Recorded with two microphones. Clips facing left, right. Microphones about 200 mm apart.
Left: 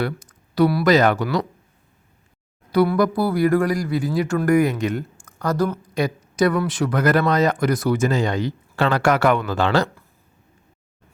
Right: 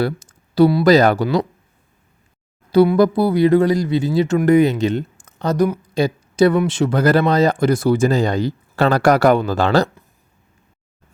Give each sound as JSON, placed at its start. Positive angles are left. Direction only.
{"t": 0.0, "sound": "speech", "side_deg": -30}
{"t": 2.7, "sound": "speech", "side_deg": -25}
{"t": 5.9, "sound": "speech", "side_deg": -25}